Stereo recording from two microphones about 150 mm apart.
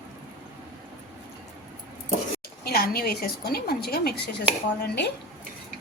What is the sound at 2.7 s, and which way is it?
Speech, 90° left.